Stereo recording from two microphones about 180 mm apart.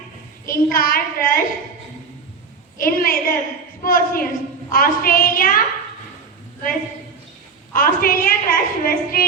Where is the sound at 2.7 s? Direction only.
55° left (ahead or behind).